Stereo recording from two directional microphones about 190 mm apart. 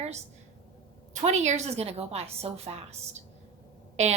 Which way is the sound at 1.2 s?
35° right (ahead or behind).